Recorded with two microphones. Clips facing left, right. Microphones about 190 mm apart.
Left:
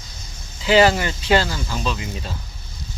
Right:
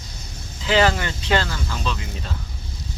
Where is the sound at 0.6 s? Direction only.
10° left (ahead or behind).